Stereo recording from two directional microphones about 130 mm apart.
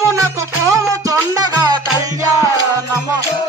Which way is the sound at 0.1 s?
25° right (ahead or behind).